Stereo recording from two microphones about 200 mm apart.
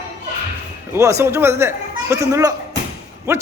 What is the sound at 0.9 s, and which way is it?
Speech, 15° right (ahead or behind).